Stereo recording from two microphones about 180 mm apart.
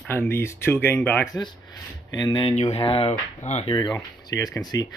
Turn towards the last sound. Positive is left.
turn(degrees=20)  # may be behind; listen again after turning